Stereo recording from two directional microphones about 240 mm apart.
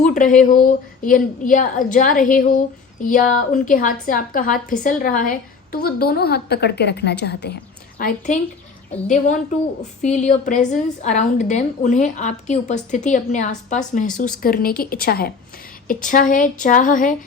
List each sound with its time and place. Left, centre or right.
0.0 s a woman's voice: left